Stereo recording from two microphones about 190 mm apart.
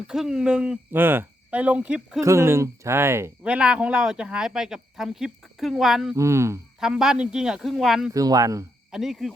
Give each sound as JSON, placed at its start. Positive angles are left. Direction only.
{"t": 0.1, "sound": "speech", "side_deg": -5}
{"t": 2.2, "sound": "speech", "side_deg": -15}
{"t": 6.1, "sound": "speech", "side_deg": -15}
{"t": 6.7, "sound": "speech", "side_deg": 0}
{"t": 8.1, "sound": "speech", "side_deg": -20}
{"t": 8.9, "sound": "speech", "side_deg": 0}